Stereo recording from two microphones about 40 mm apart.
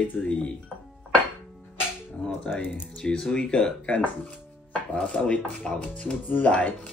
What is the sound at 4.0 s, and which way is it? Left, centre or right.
Chopping, left.